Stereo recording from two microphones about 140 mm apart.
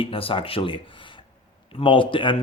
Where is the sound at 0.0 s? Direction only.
40° left (ahead or behind).